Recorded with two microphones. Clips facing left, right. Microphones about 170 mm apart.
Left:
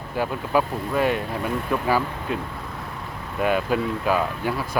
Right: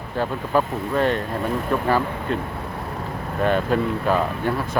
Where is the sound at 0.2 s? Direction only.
10° left (ahead or behind).